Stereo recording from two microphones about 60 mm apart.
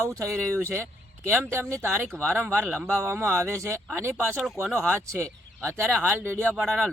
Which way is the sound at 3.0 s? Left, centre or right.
Right.